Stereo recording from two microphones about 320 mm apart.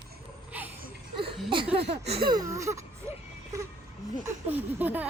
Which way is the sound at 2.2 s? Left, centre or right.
Centre.